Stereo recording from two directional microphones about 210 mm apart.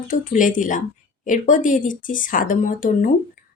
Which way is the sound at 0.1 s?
40° left (ahead or behind).